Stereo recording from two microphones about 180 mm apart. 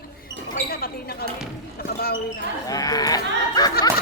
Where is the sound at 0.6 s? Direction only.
55° left (ahead or behind).